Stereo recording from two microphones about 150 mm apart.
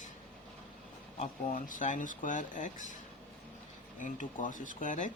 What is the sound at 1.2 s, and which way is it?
Speech, 60° left (ahead or behind).